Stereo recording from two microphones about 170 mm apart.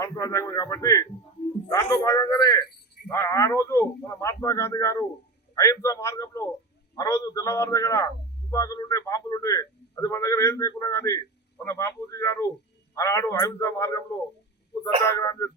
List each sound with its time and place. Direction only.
0.0 s a man's voice: 20° left (ahead or behind)
2.6 s a sound: 70° left (ahead or behind)
3.1 s a man's voice: 15° left (ahead or behind)
15.0 s speech: 20° left (ahead or behind)